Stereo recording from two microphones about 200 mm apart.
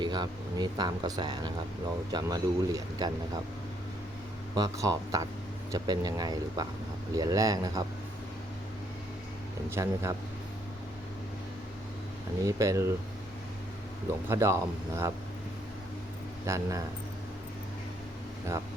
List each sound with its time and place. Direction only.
0.0 s speech: 20° right (ahead or behind)
4.5 s speech: 15° right (ahead or behind)
9.6 s speech: 15° right (ahead or behind)
12.5 s speech: 15° right (ahead or behind)
14.3 s speech: 15° right (ahead or behind)
16.5 s speech: 15° right (ahead or behind)
18.5 s speech: 15° right (ahead or behind)